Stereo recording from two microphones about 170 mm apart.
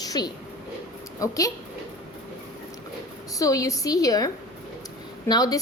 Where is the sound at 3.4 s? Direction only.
20° left (ahead or behind).